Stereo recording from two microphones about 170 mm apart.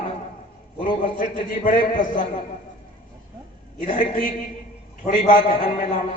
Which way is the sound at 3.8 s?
45° left (ahead or behind).